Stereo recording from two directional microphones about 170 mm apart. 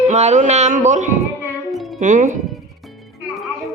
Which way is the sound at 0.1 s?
40° right (ahead or behind).